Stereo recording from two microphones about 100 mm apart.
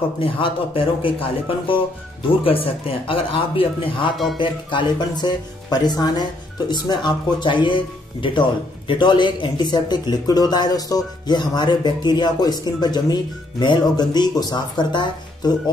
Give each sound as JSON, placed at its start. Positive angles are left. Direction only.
{"t": 0.2, "sound": "speech", "side_deg": 60}
{"t": 4.4, "sound": "speech", "side_deg": 50}